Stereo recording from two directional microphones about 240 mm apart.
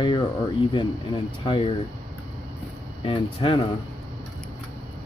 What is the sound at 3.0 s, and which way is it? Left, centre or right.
Speech, left.